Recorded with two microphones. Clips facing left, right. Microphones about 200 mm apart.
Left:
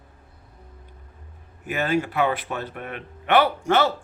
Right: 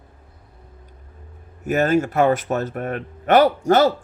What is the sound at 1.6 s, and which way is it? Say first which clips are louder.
Speech: right 6 dB; 45° right (ahead or behind).